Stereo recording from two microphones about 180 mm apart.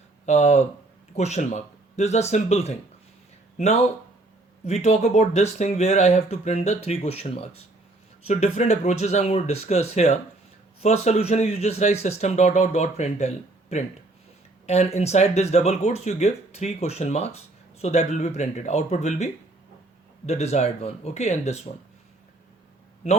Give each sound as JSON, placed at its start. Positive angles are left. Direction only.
{"t": 0.3, "sound": "speech", "side_deg": 40}
{"t": 4.6, "sound": "speech", "side_deg": 40}